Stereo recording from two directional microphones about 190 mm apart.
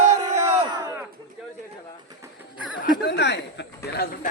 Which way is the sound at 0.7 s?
20° right (ahead or behind).